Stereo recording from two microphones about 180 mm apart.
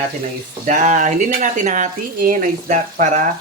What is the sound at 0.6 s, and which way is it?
Speech, 45° right (ahead or behind).